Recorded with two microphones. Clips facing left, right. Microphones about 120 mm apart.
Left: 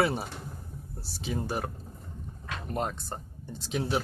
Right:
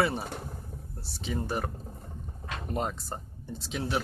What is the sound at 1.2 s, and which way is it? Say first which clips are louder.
Speech: even; 5° left (ahead or behind).